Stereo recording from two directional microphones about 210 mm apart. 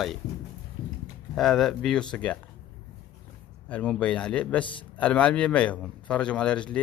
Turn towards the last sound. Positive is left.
turn(degrees=5)  # may be behind; listen again after turning